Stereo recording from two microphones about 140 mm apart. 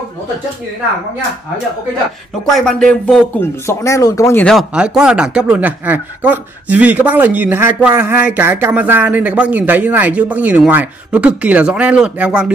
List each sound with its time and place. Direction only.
2.4 s speech: 5° left (ahead or behind)
3.6 s speech: 20° left (ahead or behind)
4.5 s speech: 5° right (ahead or behind)